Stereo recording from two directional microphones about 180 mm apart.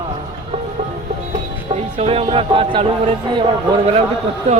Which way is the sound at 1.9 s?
30° right (ahead or behind).